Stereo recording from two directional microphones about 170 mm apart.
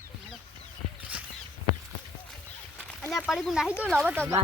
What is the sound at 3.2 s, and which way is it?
Speech, centre (ahead or behind).